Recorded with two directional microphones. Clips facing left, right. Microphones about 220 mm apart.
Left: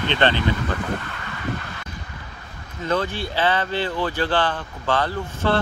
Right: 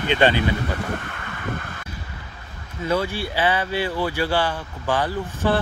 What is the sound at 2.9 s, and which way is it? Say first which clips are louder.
Speech: right 1 dB; 10° right (ahead or behind).